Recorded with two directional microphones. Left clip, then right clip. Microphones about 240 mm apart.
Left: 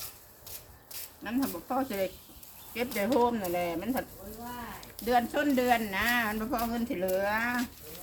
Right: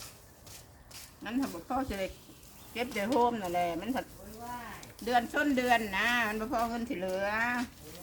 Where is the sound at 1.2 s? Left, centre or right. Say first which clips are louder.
Left 2 dB; centre.